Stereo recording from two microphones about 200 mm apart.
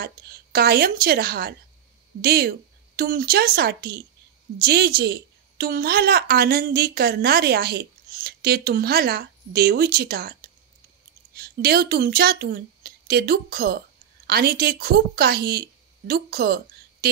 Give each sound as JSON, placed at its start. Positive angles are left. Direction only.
{"t": 0.0, "sound": "a woman's voice", "side_deg": -50}
{"t": 11.3, "sound": "a woman's voice", "side_deg": -50}